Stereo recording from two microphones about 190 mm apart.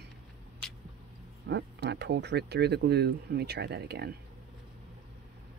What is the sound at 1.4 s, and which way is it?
Speech, 65° right (ahead or behind).